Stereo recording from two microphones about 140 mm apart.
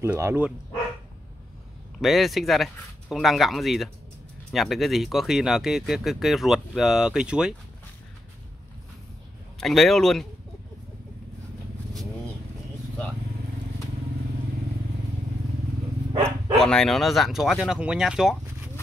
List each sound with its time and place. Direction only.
0.0 s speech: 20° right (ahead or behind)
2.0 s speech: centre (ahead or behind)
9.6 s speech: centre (ahead or behind)
16.1 s bow-wow: 35° right (ahead or behind)
16.5 s speech: 5° left (ahead or behind)